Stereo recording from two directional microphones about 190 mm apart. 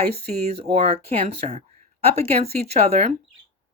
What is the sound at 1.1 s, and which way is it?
Speech, 35° right (ahead or behind).